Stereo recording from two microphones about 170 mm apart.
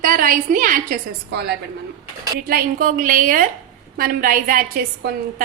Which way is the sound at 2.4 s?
60° right (ahead or behind).